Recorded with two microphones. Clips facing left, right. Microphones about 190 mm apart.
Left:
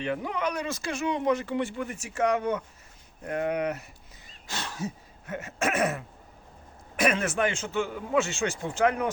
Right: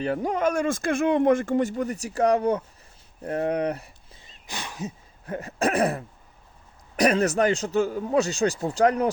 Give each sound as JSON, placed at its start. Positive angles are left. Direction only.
{"t": 0.0, "sound": "a man's voice", "side_deg": -40}
{"t": 4.4, "sound": "a sound", "side_deg": -15}
{"t": 5.2, "sound": "a man's voice", "side_deg": -35}